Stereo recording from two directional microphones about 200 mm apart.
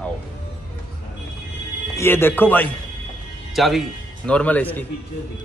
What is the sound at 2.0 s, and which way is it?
Speech, 10° left (ahead or behind).